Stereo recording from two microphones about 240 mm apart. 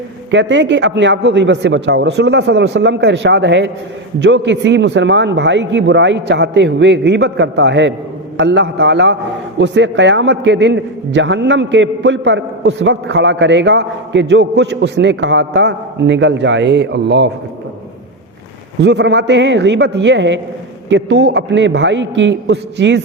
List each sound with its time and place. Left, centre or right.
0.3 s a man's voice: right
18.8 s a man's voice: right